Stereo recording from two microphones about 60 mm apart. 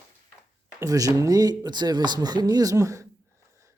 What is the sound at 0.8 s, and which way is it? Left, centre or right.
Speech, right.